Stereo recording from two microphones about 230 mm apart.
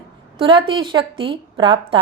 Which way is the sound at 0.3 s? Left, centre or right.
Right.